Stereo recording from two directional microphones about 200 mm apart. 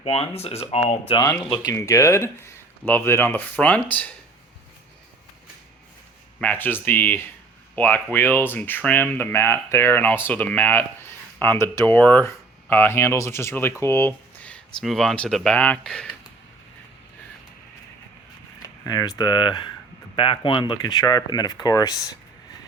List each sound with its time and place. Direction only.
0.0 s speech: 30° left (ahead or behind)
1.6 s speech: 15° left (ahead or behind)
6.4 s speech: 10° left (ahead or behind)
18.9 s speech: 20° left (ahead or behind)